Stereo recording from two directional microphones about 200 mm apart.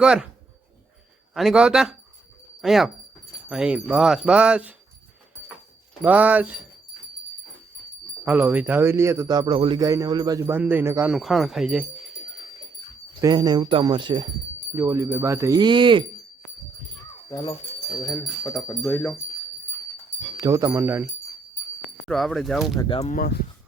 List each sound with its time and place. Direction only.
0.0 s speech: 5° right (ahead or behind)
1.3 s speech: centre (ahead or behind)
6.0 s speech: 10° right (ahead or behind)
8.2 s speech: 10° right (ahead or behind)
11.1 s speech: centre (ahead or behind)
13.2 s speech: 20° right (ahead or behind)
18.4 s speech: 10° left (ahead or behind)
20.3 s speech: 15° right (ahead or behind)
22.0 s speech: centre (ahead or behind)
23.0 s speech: 35° left (ahead or behind)